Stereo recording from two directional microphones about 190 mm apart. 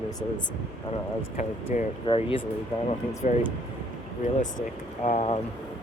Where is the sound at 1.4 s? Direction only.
35° left (ahead or behind).